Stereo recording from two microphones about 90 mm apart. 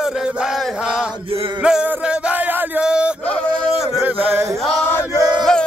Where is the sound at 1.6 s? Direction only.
10° right (ahead or behind).